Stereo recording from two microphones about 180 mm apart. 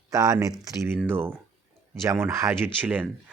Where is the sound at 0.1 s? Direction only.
20° right (ahead or behind).